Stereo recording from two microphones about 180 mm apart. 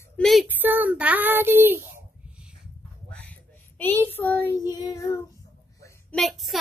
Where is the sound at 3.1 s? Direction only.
10° left (ahead or behind).